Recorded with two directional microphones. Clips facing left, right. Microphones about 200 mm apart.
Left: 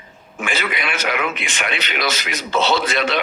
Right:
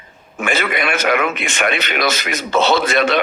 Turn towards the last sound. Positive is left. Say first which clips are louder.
# right 4 dB
turn(degrees=-50)  # may be behind; listen again after turning